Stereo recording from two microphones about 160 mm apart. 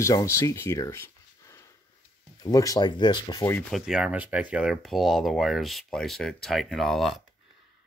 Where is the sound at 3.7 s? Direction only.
5° right (ahead or behind).